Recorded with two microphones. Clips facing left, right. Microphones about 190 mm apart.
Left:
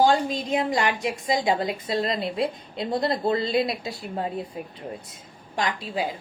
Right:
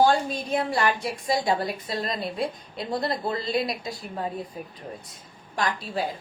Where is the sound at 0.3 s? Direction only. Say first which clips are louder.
Left 2 dB; 15° left (ahead or behind).